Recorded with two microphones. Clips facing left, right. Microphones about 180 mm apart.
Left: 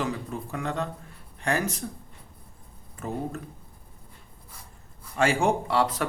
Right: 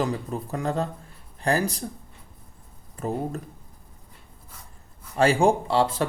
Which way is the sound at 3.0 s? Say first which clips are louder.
Right 5 dB; 35° right (ahead or behind).